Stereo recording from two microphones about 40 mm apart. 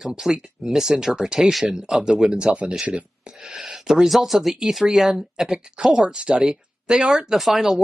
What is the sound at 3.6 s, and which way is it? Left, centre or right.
Speech, centre.